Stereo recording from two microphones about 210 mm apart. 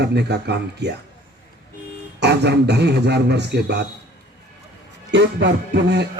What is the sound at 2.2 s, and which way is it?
Speech, 50° right (ahead or behind).